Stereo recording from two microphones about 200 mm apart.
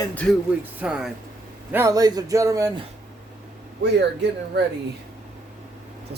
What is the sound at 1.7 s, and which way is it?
Speech, 15° right (ahead or behind).